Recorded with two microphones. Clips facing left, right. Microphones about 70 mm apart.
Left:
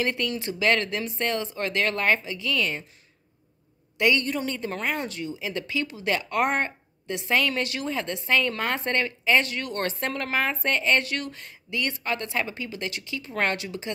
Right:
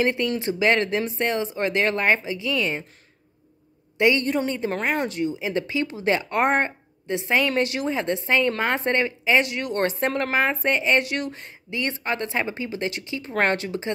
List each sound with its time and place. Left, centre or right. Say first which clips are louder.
0.0 s speech: right 5 dB; right
4.0 s speech: right 3 dB; right